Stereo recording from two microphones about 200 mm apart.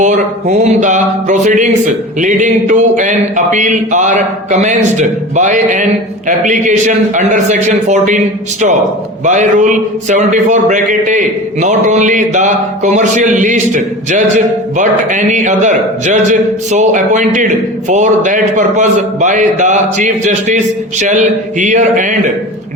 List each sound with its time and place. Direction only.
0.0 s a man's voice: 35° right (ahead or behind)
9.2 s a man's voice: 35° right (ahead or behind)